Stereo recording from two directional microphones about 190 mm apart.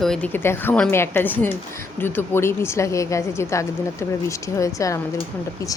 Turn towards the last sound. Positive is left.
turn(degrees=15)  # may be behind; listen again after turning